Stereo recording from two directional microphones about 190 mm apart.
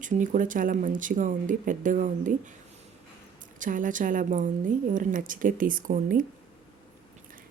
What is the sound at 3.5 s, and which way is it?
Speech, 45° right (ahead or behind).